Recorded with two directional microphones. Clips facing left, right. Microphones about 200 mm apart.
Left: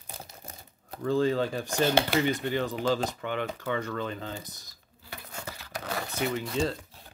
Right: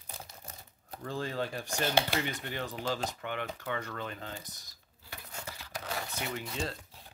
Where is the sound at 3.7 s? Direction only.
30° left (ahead or behind).